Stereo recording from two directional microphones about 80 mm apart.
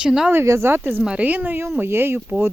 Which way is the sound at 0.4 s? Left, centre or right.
Right.